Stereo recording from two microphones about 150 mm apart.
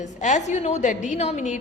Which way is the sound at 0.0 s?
50° left (ahead or behind).